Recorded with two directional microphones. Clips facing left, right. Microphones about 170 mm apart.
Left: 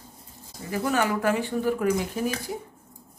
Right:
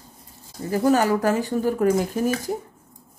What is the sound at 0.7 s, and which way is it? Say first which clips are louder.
Speech: right 6 dB; 40° right (ahead or behind).